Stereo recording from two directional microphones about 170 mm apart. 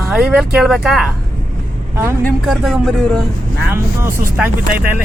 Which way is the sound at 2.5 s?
Centre (ahead or behind).